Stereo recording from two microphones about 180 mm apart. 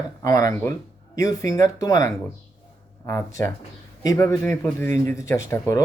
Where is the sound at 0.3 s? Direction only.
20° left (ahead or behind).